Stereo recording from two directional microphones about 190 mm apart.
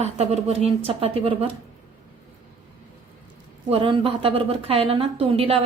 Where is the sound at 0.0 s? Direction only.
35° right (ahead or behind).